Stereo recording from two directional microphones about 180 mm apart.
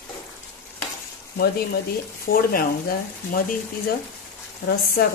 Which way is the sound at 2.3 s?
55° left (ahead or behind).